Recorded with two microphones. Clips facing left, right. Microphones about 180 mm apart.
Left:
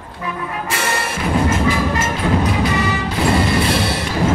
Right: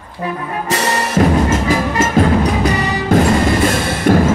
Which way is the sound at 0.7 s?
40° right (ahead or behind).